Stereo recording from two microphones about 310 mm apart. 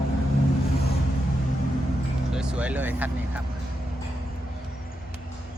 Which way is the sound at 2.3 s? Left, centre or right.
Centre.